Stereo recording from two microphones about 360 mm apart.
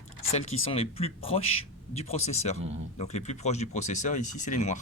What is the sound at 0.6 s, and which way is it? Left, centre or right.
Speech, centre.